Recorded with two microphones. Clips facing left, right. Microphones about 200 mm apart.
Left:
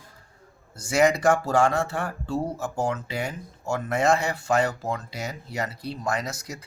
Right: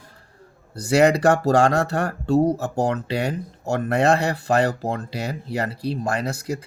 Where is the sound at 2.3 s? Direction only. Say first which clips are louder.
Right 10 dB; 40° right (ahead or behind).